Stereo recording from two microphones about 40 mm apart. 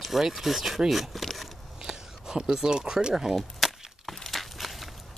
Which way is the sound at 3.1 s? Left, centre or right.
Centre.